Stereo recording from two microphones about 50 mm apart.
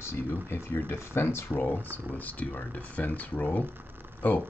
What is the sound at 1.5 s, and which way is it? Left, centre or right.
Speech, left.